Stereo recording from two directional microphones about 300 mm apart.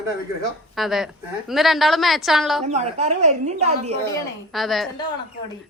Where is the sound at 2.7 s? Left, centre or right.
Right.